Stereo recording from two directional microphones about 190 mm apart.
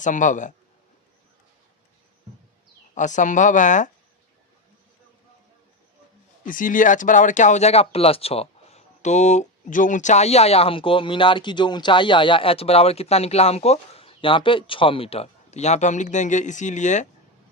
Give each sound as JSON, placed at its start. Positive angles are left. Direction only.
{"t": 0.0, "sound": "speech", "side_deg": 40}
{"t": 2.9, "sound": "speech", "side_deg": 40}
{"t": 6.4, "sound": "speech", "side_deg": 45}